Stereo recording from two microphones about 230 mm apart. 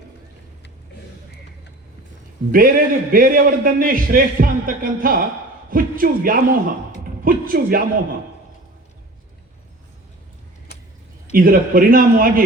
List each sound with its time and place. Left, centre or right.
2.5 s a man's voice: right
11.3 s a man's voice: right